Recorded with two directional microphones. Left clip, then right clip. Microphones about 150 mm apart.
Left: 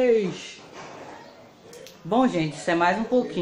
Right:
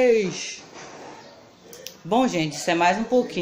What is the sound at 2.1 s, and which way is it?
Speech, 15° right (ahead or behind).